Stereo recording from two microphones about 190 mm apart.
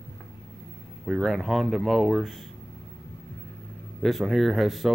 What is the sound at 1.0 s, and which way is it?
Speech, centre (ahead or behind).